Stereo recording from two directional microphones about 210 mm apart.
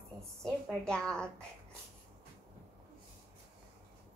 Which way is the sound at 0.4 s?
5° left (ahead or behind).